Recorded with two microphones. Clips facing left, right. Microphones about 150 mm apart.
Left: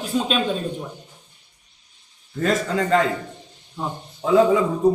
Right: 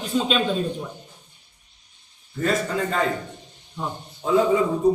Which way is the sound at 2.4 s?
90° left.